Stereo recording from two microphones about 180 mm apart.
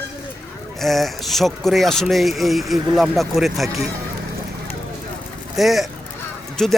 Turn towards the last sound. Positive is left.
turn(degrees=5)  # may be behind; listen again after turning